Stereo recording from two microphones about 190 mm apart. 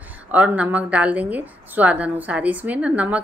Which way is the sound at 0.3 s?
5° right (ahead or behind).